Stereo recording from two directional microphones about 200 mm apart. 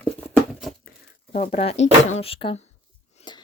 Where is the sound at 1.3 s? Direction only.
35° left (ahead or behind).